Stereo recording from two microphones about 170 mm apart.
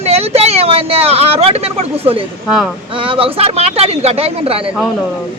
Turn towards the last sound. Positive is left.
turn(degrees=-35)  # may be behind; listen again after turning